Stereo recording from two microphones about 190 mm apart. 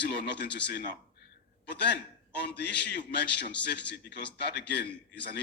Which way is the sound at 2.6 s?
65° left (ahead or behind).